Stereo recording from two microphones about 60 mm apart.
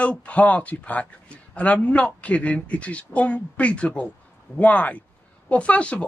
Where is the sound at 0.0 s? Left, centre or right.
Left.